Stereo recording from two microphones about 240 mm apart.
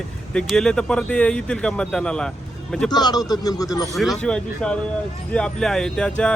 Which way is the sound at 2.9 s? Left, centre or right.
Centre.